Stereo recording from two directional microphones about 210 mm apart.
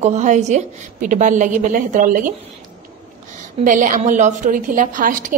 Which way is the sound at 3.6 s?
40° right (ahead or behind).